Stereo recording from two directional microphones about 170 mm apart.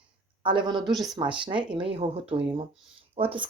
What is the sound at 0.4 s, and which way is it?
Speech, 30° right (ahead or behind).